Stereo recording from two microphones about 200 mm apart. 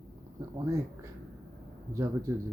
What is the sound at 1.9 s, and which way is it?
Speech, 15° right (ahead or behind).